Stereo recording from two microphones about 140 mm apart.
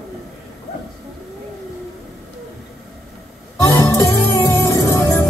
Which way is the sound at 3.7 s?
20° left (ahead or behind).